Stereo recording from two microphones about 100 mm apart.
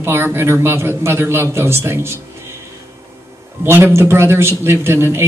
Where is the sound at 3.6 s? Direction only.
25° right (ahead or behind).